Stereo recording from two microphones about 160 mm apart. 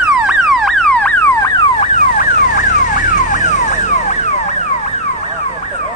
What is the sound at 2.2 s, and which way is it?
Car alarm, 55° left (ahead or behind).